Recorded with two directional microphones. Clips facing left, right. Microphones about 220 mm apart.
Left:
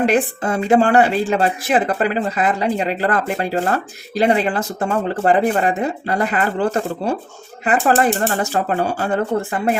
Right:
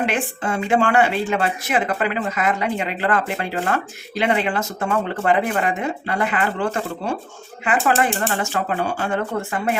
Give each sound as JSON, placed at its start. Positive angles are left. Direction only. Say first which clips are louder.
{"t": 0.0, "sound": "speech", "louder": "left 6 dB", "side_deg": 40}